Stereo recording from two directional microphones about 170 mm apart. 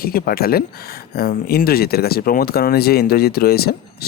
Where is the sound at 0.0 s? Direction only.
60° left (ahead or behind).